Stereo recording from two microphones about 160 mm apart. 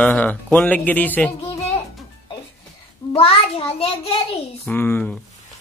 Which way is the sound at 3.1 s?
35° left (ahead or behind).